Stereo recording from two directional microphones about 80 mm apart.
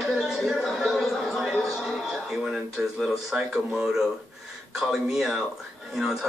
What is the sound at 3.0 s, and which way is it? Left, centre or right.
Speech, centre.